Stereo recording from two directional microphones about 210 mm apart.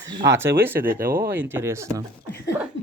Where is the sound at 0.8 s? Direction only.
45° right (ahead or behind).